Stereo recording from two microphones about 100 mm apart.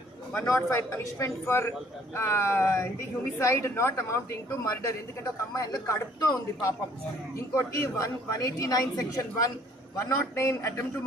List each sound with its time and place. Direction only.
0.4 s a woman's voice: 30° left (ahead or behind)